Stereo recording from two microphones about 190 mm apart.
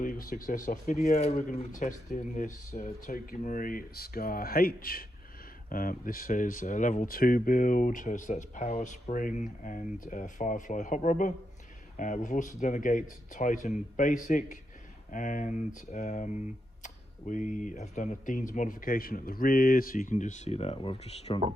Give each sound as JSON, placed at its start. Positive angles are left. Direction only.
{"t": 0.0, "sound": "speech", "side_deg": 45}